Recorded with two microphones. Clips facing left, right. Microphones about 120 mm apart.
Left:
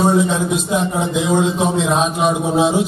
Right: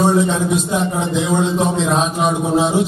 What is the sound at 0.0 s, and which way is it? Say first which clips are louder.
A man's voice: even; centre (ahead or behind).